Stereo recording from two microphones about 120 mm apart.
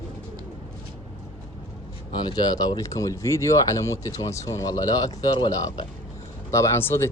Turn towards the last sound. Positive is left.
turn(degrees=20)  # may be behind; listen again after turning